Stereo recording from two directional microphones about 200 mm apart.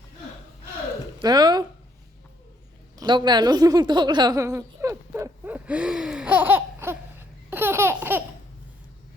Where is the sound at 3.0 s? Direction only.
20° right (ahead or behind).